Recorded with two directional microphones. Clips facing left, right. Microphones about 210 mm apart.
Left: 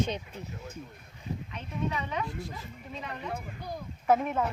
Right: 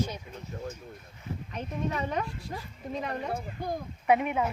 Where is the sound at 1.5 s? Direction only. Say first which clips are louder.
Right 2 dB; 45° right (ahead or behind).